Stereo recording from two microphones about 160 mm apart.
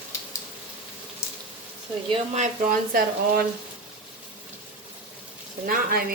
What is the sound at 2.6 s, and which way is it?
Speech, 70° right (ahead or behind).